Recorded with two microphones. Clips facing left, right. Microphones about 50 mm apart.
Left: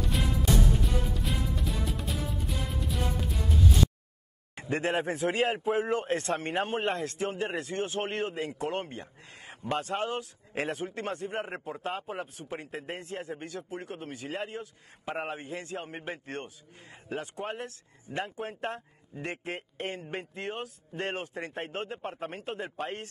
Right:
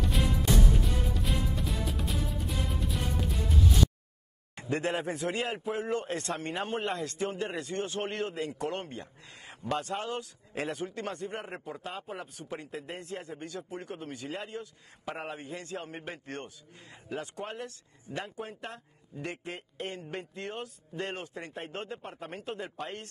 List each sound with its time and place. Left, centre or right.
0.0 s music: centre
4.6 s a man's voice: left
8.5 s a man's voice: left
11.9 s a man's voice: left
14.5 s a man's voice: left
15.1 s a man's voice: left
17.5 s a man's voice: left
21.8 s a man's voice: left
22.1 s a man's voice: left